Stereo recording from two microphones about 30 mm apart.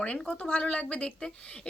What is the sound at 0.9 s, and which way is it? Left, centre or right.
Speech, left.